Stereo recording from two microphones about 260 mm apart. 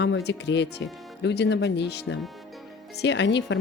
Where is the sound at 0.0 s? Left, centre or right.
Left.